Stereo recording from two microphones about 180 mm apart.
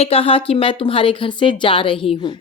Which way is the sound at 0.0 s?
30° left (ahead or behind).